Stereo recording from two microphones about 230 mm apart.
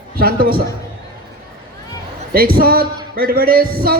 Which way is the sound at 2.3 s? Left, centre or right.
Right.